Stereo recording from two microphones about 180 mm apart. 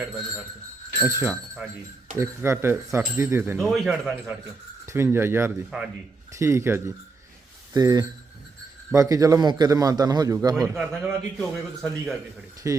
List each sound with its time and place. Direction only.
1.0 s speech: 10° right (ahead or behind)
3.7 s a man's voice: centre (ahead or behind)
4.9 s a man's voice: 15° right (ahead or behind)
10.5 s a man's voice: centre (ahead or behind)
12.7 s speech: 15° right (ahead or behind)